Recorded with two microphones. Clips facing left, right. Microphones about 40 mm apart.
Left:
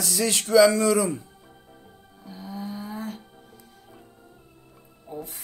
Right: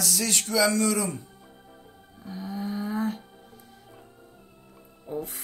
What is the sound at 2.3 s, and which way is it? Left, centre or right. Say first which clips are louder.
Cattle: right 2 dB; centre.